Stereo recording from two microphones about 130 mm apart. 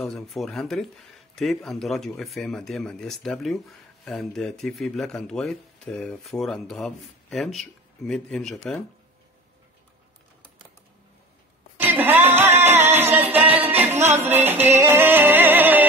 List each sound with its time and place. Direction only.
0.0 s speech: centre (ahead or behind)
11.7 s music: 15° right (ahead or behind)